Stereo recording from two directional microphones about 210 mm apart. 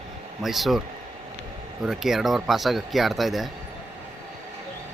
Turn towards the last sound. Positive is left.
turn(degrees=0)  # may be behind; listen again after turning